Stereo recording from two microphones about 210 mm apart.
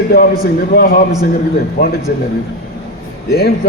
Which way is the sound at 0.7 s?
45° left (ahead or behind).